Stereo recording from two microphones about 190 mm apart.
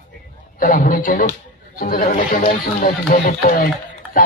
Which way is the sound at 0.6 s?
45° left (ahead or behind).